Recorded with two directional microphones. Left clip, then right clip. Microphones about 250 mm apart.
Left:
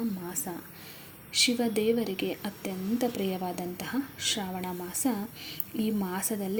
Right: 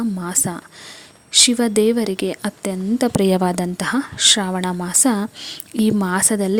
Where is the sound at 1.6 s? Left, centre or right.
Right.